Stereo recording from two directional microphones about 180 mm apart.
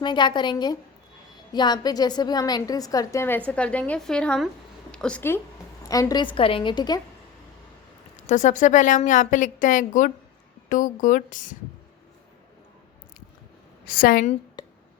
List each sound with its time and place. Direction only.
0.0 s a woman's voice: 25° left (ahead or behind); by 5.4 s 10° left (ahead or behind)
5.9 s a woman's voice: 20° left (ahead or behind)
8.1 s a woman's voice: 40° left (ahead or behind)
13.8 s a woman's voice: 55° left (ahead or behind)